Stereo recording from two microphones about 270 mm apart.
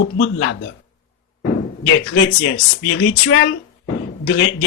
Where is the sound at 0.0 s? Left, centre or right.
Left.